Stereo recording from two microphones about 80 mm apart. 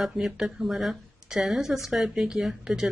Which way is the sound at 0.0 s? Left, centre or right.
Centre.